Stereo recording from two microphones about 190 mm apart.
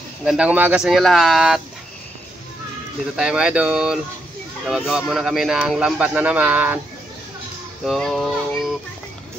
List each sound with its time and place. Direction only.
0.2 s speech: 5° right (ahead or behind)
3.2 s speech: 5° right (ahead or behind)
7.8 s speech: centre (ahead or behind)